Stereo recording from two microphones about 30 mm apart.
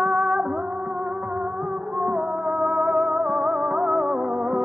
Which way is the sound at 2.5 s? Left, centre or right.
Centre.